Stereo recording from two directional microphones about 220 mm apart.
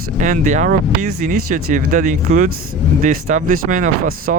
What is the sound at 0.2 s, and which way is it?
Speech, 35° right (ahead or behind).